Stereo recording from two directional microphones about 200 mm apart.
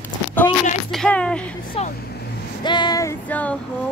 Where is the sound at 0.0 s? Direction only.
10° left (ahead or behind).